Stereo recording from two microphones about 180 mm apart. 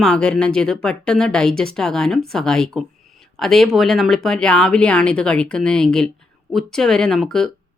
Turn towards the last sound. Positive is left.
turn(degrees=0)  # may be behind; listen again after turning